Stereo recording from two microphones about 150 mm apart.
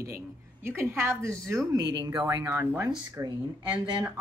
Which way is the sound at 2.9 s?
30° right (ahead or behind).